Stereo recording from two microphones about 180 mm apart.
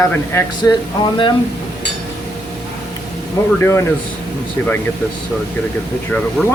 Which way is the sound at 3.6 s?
15° left (ahead or behind).